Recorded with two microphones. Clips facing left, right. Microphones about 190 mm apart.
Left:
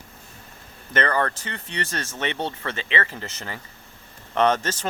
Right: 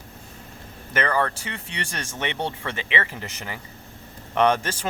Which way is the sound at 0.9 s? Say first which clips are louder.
Even; 10° right (ahead or behind).